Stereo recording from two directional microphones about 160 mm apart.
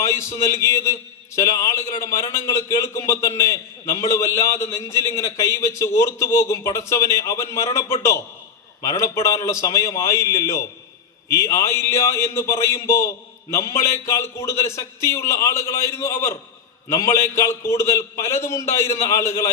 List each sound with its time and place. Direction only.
0.0 s a man's voice: 15° left (ahead or behind)